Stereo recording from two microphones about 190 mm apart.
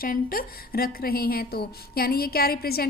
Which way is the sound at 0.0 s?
50° left (ahead or behind).